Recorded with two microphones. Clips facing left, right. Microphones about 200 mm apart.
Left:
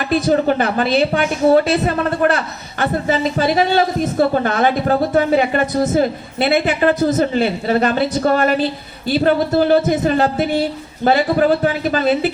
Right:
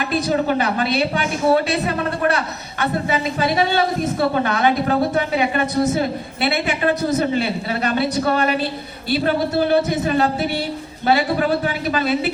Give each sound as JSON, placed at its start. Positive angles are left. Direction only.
{"t": 0.3, "sound": "a woman's voice", "side_deg": 45}